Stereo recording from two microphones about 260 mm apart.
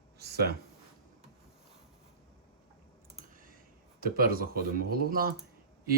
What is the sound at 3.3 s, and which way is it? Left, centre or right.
Clicking, right.